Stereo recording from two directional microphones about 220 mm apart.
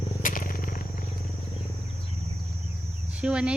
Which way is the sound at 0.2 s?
40° left (ahead or behind).